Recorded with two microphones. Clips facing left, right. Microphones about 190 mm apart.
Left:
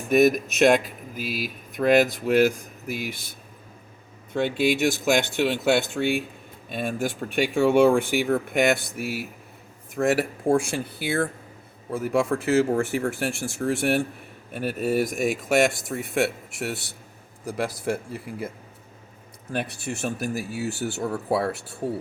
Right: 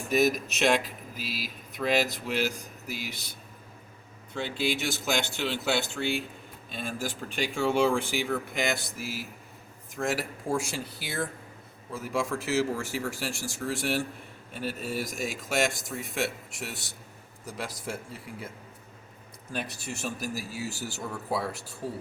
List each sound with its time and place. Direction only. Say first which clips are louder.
0.1 s speech: left 7 dB; 50° left (ahead or behind)
4.4 s speech: left 8 dB; 55° left (ahead or behind)
19.5 s speech: left 6 dB; 60° left (ahead or behind)